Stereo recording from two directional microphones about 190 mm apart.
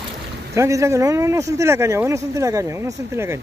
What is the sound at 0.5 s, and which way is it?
Speech, 15° right (ahead or behind).